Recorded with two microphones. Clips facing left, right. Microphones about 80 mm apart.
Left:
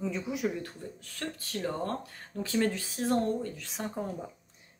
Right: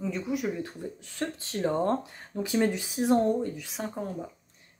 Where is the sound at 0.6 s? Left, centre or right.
Right.